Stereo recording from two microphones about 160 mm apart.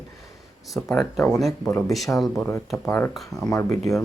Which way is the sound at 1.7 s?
20° left (ahead or behind).